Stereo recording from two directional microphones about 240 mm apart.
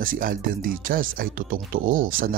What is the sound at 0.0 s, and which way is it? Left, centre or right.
Speech, right.